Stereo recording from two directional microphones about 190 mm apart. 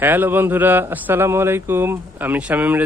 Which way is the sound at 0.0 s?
10° right (ahead or behind).